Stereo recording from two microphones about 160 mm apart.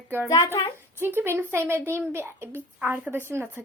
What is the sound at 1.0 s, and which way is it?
A woman's voice, 15° right (ahead or behind).